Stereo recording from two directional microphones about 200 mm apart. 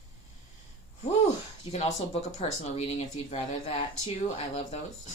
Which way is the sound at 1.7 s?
35° left (ahead or behind).